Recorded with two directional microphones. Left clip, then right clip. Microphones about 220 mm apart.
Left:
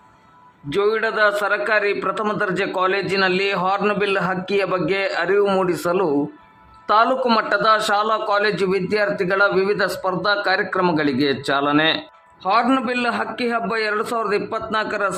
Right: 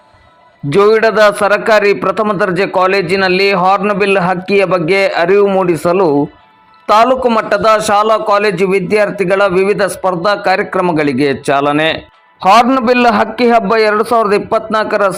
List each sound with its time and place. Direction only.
0.7 s a man's voice: 25° right (ahead or behind)
12.4 s a man's voice: 30° right (ahead or behind)